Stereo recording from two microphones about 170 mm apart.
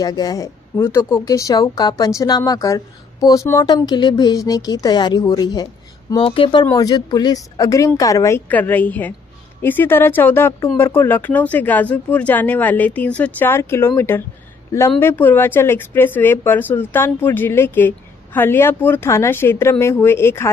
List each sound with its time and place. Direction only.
0.0 s speech: 20° left (ahead or behind)